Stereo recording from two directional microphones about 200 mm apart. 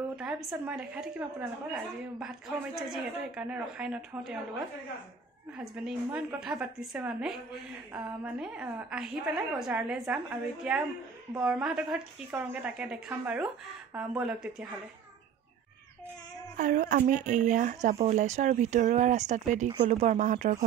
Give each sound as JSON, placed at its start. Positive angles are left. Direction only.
{"t": 0.1, "sound": "a woman's voice", "side_deg": -5}
{"t": 5.6, "sound": "a woman's voice", "side_deg": -5}
{"t": 16.5, "sound": "speech", "side_deg": -40}